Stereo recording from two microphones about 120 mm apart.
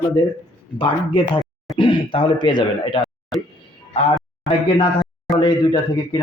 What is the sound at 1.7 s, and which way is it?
Speech, 45° left (ahead or behind).